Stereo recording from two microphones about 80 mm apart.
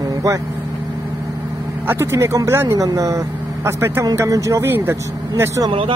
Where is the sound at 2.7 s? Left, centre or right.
Right.